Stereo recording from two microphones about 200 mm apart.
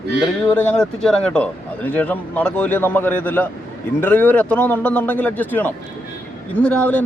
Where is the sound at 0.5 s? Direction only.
10° left (ahead or behind).